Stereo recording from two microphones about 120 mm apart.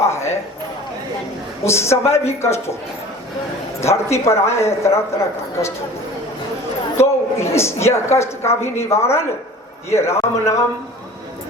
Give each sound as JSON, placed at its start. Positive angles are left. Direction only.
{"t": 0.0, "sound": "a sound", "side_deg": 25}
{"t": 1.6, "sound": "a woman's voice", "side_deg": 20}
{"t": 3.8, "sound": "a woman's voice", "side_deg": 25}
{"t": 6.9, "sound": "a woman's voice", "side_deg": 20}